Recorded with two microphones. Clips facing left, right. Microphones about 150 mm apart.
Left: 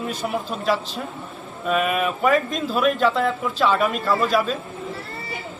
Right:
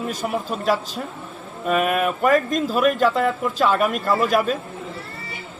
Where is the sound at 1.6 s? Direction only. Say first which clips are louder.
Right 1 dB; 50° right (ahead or behind).